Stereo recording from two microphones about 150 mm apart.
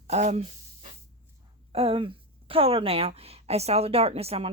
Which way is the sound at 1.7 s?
40° right (ahead or behind).